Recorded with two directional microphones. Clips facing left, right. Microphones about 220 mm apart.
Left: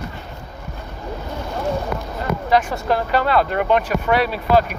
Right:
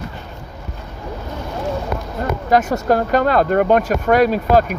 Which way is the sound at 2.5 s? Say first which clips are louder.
Right 4 dB; 45° right (ahead or behind).